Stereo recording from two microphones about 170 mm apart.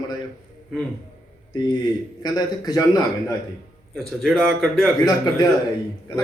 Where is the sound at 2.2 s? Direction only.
25° left (ahead or behind).